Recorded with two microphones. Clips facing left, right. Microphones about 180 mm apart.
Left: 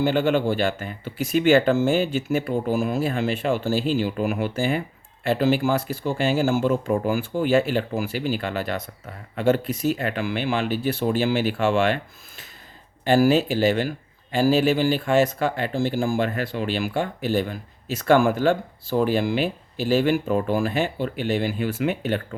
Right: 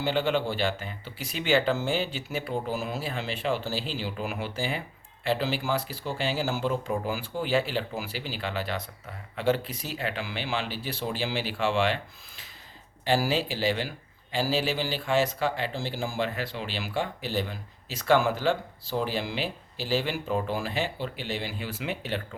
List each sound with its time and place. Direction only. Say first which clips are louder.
0.0 s speech: left 6 dB; 50° left (ahead or behind)
13.1 s speech: left 8 dB; 50° left (ahead or behind)